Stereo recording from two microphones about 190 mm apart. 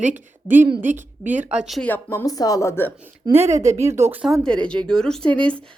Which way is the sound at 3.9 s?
10° right (ahead or behind).